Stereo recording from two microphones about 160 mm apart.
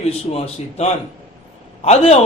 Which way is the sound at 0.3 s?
40° left (ahead or behind).